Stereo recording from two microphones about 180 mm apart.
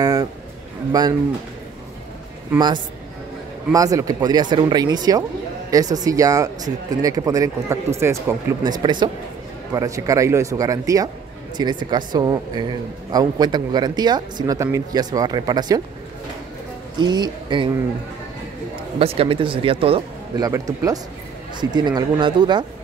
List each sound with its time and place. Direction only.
0.0 s a sound: 20° right (ahead or behind)
0.9 s speech: 20° right (ahead or behind)
3.7 s speech: 20° right (ahead or behind)
17.0 s speech: 25° right (ahead or behind)
18.9 s a man's voice: 35° right (ahead or behind)
20.4 s speech: 20° right (ahead or behind)